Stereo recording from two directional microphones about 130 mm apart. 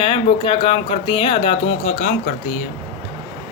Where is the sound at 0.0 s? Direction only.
45° left (ahead or behind).